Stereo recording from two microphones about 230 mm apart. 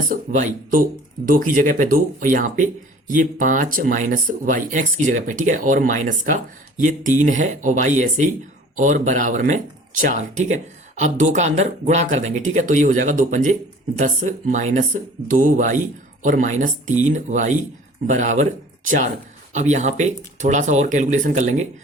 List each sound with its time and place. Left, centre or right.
0.1 s speech: right